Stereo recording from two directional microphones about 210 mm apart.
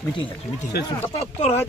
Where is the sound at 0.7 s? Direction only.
50° left (ahead or behind).